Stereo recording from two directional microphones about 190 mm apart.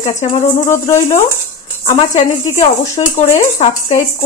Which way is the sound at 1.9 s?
40° left (ahead or behind).